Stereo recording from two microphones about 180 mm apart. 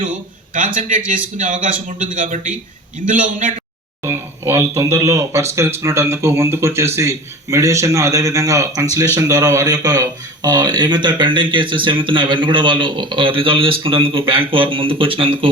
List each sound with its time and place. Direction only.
0.5 s speech: 45° right (ahead or behind)
4.0 s a man's voice: 15° right (ahead or behind); by 15.4 s 30° right (ahead or behind)